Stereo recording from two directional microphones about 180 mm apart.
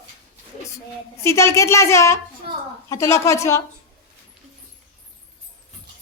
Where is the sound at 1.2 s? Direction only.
15° left (ahead or behind).